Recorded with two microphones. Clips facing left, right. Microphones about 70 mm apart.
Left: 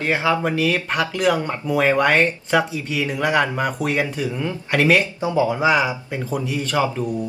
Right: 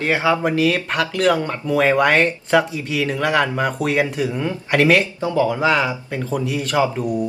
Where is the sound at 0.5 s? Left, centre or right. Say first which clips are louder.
Right 2 dB; centre.